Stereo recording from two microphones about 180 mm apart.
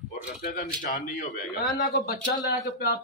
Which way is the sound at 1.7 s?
55° left (ahead or behind).